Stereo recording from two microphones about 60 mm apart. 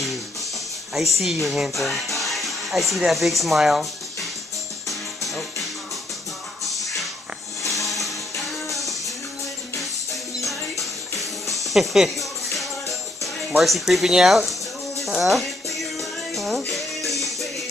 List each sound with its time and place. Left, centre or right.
0.9 s speech: centre
4.8 s music: centre
10.4 s music: centre
14.1 s speech: centre
15.0 s music: centre